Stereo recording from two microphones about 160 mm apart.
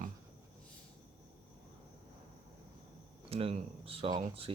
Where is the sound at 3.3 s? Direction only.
35° right (ahead or behind).